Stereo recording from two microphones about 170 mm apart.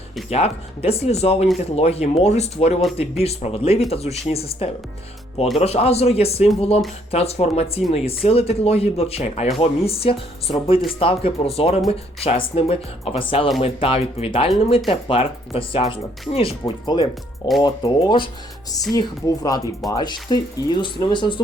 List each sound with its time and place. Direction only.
0.3 s speech: 40° left (ahead or behind)